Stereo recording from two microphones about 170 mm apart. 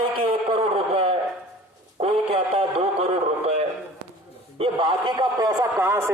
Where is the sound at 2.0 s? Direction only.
35° right (ahead or behind).